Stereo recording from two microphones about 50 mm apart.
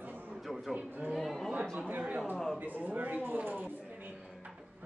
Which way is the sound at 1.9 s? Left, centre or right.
Right.